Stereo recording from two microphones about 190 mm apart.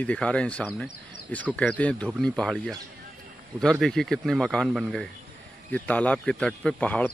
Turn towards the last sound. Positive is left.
turn(degrees=5)  # may be behind; listen again after turning